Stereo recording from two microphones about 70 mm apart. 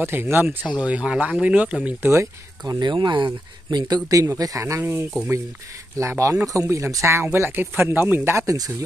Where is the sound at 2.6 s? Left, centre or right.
Right.